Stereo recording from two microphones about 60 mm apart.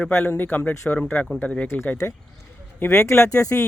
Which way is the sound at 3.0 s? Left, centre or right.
Left.